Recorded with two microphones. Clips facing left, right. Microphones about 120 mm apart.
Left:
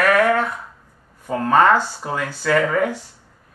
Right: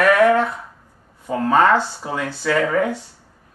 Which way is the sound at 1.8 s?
20° right (ahead or behind).